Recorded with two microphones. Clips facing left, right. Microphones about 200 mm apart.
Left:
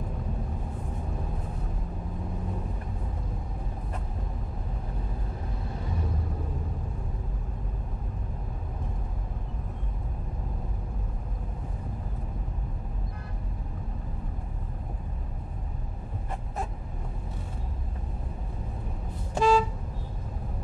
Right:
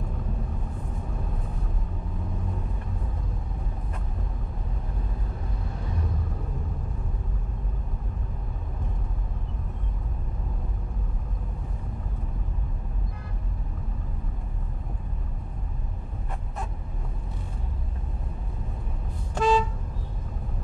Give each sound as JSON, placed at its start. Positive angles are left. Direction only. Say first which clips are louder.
{"t": 19.3, "sound": "vehicle", "louder": "even", "side_deg": 0}